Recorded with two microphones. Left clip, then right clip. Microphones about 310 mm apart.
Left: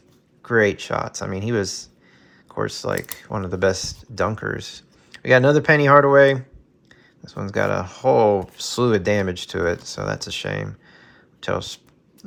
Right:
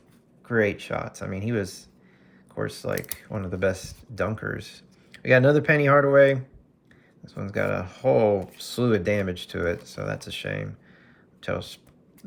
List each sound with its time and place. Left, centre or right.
0.4 s speech: centre